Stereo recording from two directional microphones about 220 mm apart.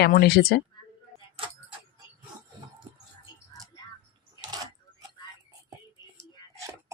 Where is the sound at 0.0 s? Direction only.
45° left (ahead or behind).